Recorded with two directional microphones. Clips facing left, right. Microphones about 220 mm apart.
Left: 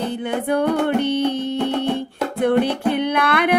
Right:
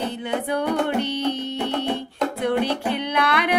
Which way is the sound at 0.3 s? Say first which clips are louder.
Left 4 dB; 50° left (ahead or behind).